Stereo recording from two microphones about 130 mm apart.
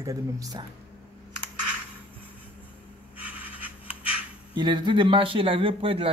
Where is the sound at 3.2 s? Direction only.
10° right (ahead or behind).